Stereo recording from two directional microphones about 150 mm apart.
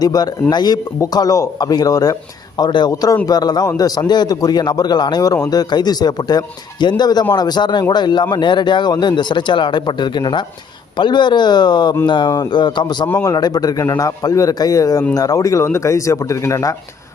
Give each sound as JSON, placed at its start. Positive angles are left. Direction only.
{"t": 0.0, "sound": "speech", "side_deg": 25}
{"t": 13.1, "sound": "speech", "side_deg": 20}